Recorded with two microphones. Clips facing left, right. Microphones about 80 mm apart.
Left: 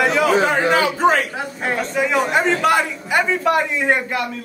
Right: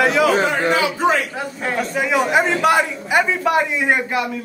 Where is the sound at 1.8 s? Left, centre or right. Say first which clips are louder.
Right 1 dB; centre.